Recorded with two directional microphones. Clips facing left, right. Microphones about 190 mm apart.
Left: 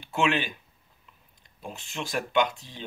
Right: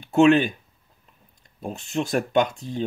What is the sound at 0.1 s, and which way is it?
Speech, 45° right (ahead or behind).